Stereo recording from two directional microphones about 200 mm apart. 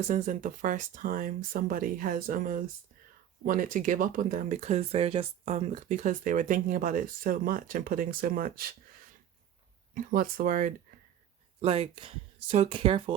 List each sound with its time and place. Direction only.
0.1 s speech: 40° right (ahead or behind)
9.9 s speech: 45° right (ahead or behind)
11.6 s speech: 30° right (ahead or behind)